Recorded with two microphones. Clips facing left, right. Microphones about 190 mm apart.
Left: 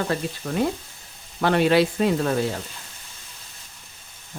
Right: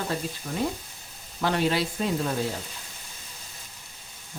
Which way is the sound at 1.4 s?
65° left (ahead or behind).